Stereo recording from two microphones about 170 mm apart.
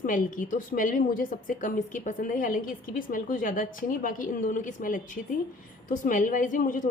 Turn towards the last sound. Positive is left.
turn(degrees=50)  # may be behind; listen again after turning